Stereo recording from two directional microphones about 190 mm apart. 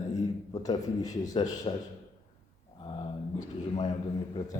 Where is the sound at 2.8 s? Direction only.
25° left (ahead or behind).